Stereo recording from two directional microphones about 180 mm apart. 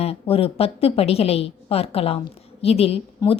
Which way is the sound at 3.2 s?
20° left (ahead or behind).